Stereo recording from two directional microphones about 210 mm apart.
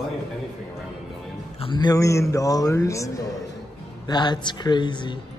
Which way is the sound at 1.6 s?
20° left (ahead or behind).